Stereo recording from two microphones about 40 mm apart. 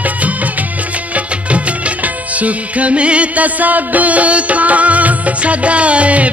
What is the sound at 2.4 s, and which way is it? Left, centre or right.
Music, right.